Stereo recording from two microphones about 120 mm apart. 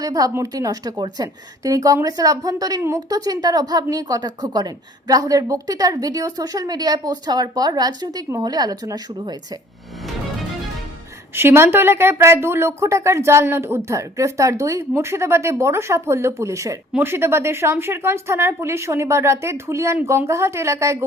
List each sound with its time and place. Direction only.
0.0 s a woman's voice: 30° right (ahead or behind)
11.3 s speech: 20° right (ahead or behind)